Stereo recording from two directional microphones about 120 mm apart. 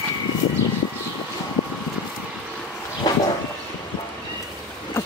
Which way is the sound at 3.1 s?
35° left (ahead or behind).